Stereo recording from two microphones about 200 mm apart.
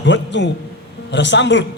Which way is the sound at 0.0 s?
65° left (ahead or behind).